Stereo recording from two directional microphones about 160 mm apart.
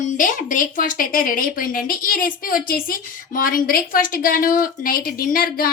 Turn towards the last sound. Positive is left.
turn(degrees=65)  # may be behind; listen again after turning